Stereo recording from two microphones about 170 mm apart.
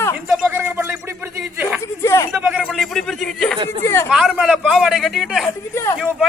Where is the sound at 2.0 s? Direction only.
15° left (ahead or behind).